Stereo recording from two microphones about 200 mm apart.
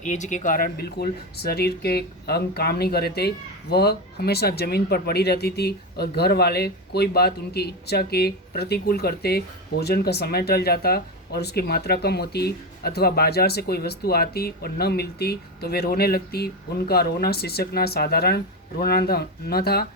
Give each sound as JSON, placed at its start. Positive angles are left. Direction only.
{"t": 0.0, "sound": "speech", "side_deg": 40}